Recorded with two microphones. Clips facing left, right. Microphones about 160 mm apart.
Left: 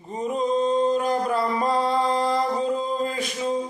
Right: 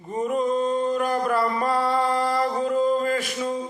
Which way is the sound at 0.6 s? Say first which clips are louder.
Left 2 dB; 20° left (ahead or behind).